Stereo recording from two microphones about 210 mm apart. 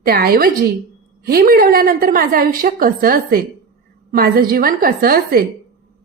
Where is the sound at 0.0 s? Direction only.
45° right (ahead or behind).